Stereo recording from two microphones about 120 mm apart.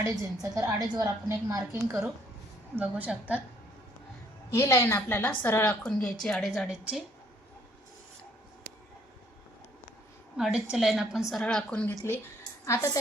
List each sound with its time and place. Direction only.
0.0 s a woman's voice: 25° right (ahead or behind)
2.7 s a woman's voice: 10° right (ahead or behind)
4.5 s a woman's voice: 20° left (ahead or behind)
6.2 s a woman's voice: 5° left (ahead or behind)
10.3 s a woman's voice: 5° right (ahead or behind)
12.6 s a woman's voice: 25° left (ahead or behind)